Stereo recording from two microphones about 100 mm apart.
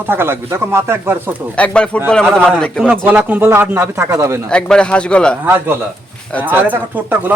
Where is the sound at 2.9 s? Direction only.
15° right (ahead or behind).